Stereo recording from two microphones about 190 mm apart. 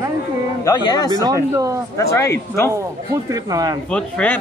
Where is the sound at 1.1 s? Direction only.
20° right (ahead or behind).